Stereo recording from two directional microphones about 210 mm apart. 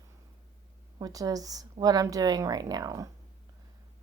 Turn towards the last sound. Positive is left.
turn(degrees=-15)  # may be behind; listen again after turning